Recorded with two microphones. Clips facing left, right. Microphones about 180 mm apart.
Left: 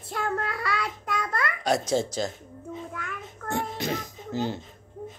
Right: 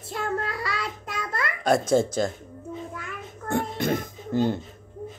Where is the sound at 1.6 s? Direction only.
50° right (ahead or behind).